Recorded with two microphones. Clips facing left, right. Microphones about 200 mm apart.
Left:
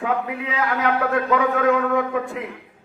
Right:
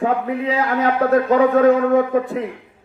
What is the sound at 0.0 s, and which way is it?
A man's voice, 35° right (ahead or behind).